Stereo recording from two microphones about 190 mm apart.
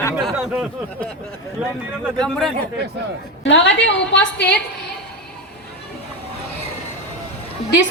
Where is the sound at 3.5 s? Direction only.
70° left (ahead or behind).